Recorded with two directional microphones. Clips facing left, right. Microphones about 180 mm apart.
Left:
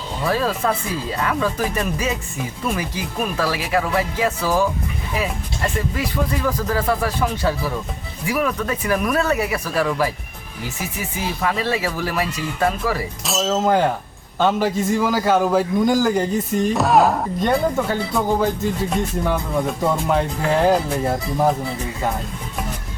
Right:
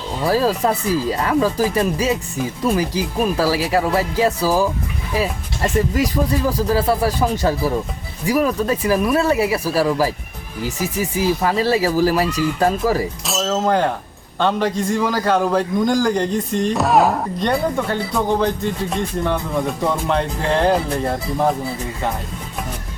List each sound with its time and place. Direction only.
0.3 s speech: 35° right (ahead or behind)
5.9 s speech: 40° right (ahead or behind)
13.2 s a man's voice: centre (ahead or behind)